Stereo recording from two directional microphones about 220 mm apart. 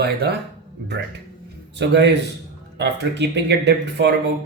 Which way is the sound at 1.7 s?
50° right (ahead or behind).